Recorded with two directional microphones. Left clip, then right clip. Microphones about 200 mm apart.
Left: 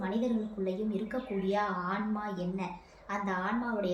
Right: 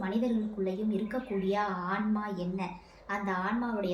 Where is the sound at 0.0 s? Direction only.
5° right (ahead or behind).